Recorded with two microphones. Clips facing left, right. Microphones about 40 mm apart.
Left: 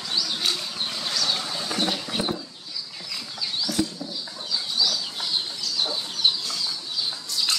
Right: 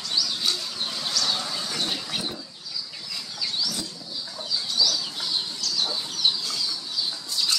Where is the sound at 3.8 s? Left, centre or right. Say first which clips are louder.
Left 10 dB; left.